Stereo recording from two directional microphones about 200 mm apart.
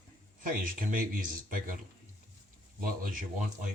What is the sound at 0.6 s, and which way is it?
Speech, 45° right (ahead or behind).